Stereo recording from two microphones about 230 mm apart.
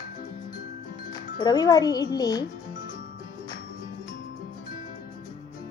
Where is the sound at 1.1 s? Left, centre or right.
Centre.